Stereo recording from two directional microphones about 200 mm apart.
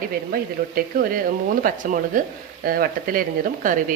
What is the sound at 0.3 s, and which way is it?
Speech, 45° right (ahead or behind).